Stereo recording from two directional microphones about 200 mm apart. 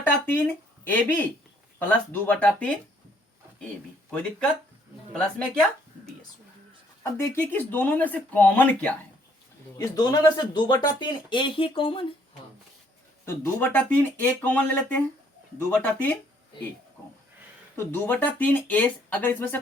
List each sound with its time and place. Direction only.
0.0 s speech: 10° left (ahead or behind)
5.1 s speech: 5° left (ahead or behind)
7.0 s speech: 10° left (ahead or behind)
13.2 s speech: 10° left (ahead or behind)
17.7 s speech: 10° left (ahead or behind)